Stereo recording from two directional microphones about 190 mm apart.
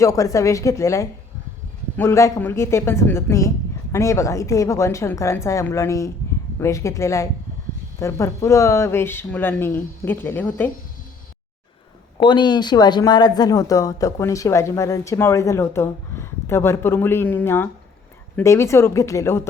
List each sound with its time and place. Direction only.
0.0 s speech: 15° left (ahead or behind)
12.2 s speech: 25° left (ahead or behind)